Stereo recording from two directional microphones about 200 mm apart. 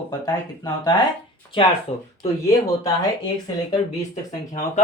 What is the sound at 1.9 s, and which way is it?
Speech, 30° left (ahead or behind).